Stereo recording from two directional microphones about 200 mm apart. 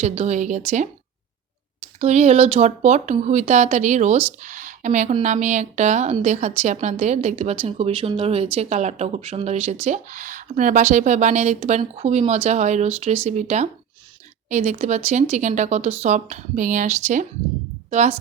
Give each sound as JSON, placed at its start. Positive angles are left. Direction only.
{"t": 0.0, "sound": "speech", "side_deg": -35}
{"t": 2.0, "sound": "a woman's voice", "side_deg": -35}